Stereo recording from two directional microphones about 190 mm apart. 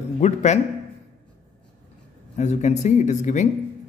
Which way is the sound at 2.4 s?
35° left (ahead or behind).